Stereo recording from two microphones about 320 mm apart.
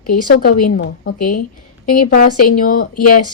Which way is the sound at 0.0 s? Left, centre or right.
Left.